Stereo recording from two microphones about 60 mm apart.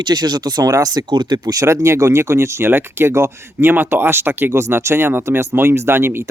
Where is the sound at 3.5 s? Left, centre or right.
Right.